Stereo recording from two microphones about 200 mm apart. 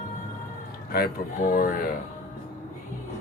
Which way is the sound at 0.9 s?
45° left (ahead or behind).